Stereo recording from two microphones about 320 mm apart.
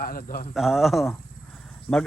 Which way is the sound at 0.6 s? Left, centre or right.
Centre.